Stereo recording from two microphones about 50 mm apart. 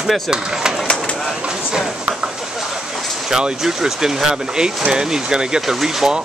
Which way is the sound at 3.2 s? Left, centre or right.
Centre.